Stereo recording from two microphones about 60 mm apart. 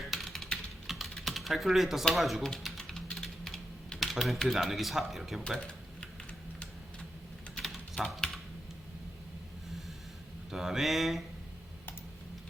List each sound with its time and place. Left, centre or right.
0.1 s typing: centre
4.5 s a man's voice: centre
5.4 s typing: centre
8.0 s speech: left
10.5 s a man's voice: centre